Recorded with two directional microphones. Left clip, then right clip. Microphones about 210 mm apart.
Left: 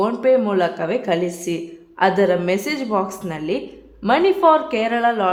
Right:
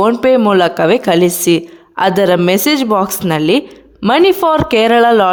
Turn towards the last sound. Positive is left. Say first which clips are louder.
# right 9 dB
turn(degrees=-50)  # may be behind; listen again after turning